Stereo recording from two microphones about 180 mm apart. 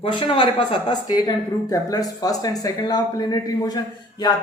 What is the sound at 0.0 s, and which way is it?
Speech, 30° left (ahead or behind).